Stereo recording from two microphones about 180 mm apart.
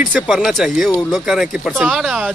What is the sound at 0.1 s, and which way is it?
Speech, centre (ahead or behind).